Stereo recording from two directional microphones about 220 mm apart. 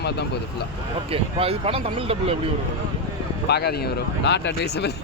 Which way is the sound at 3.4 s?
50° left (ahead or behind).